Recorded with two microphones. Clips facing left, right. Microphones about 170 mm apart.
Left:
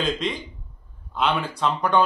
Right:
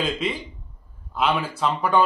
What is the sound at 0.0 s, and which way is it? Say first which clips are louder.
A man's voice: even; 5° right (ahead or behind).